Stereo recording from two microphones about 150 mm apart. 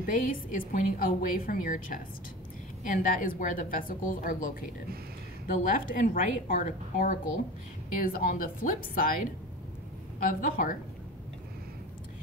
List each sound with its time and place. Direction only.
0.0 s a woman's voice: 60° left (ahead or behind)